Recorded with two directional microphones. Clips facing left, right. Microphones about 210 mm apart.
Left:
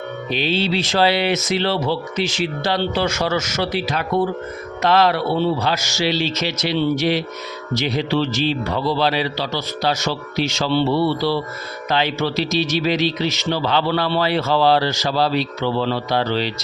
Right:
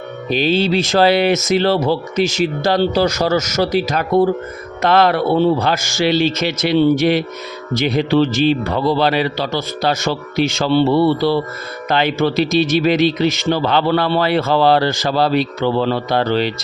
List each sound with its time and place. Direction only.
0.3 s speech: 45° right (ahead or behind)
4.8 s speech: 55° right (ahead or behind)